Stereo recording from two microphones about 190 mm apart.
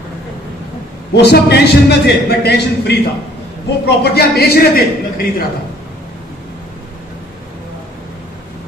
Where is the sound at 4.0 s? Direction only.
55° left (ahead or behind).